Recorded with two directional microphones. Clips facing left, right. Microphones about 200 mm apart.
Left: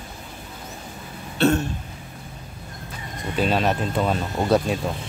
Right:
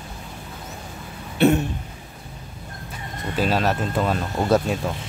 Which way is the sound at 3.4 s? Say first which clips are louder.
Even; centre (ahead or behind).